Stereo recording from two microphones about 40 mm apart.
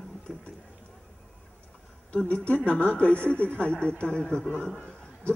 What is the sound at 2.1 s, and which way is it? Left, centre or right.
A woman's voice, left.